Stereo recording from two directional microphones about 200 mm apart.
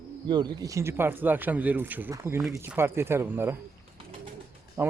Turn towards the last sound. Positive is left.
turn(degrees=-15)  # may be behind; listen again after turning